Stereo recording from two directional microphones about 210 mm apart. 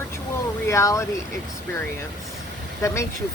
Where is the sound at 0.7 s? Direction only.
15° left (ahead or behind).